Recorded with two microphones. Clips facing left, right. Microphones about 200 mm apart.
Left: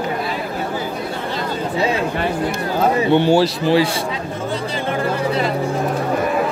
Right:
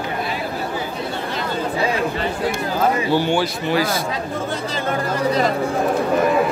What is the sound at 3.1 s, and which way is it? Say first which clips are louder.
Speech: left 5 dB; 25° left (ahead or behind).